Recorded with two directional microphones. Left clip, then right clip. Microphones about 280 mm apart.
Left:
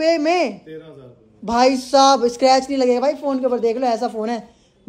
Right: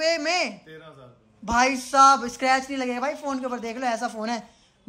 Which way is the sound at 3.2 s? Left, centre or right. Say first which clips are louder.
Left 11 dB; centre.